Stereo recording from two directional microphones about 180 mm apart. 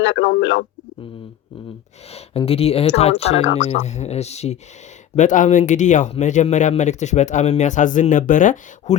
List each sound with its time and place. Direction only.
0.0 s speech: 80° left
2.1 s speech: 30° left (ahead or behind)